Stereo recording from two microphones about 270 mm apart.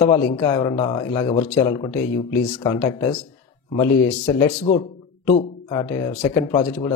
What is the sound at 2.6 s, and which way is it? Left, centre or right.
Speech, centre.